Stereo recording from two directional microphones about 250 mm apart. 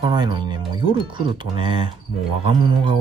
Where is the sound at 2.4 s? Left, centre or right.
Centre.